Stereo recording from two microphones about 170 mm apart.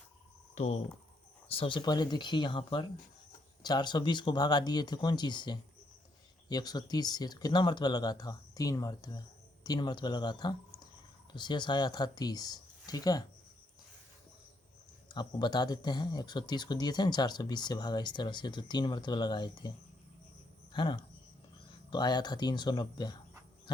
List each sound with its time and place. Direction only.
0.5 s speech: 40° left (ahead or behind); by 13.2 s 20° left (ahead or behind)
15.1 s speech: 25° left (ahead or behind)
20.7 s speech: 30° left (ahead or behind)